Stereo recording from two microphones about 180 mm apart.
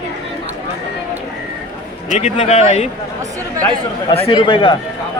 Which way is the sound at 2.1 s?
40° left (ahead or behind).